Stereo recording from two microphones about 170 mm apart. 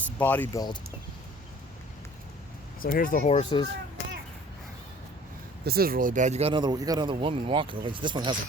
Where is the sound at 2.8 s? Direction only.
55° left (ahead or behind); by 3.6 s 30° left (ahead or behind).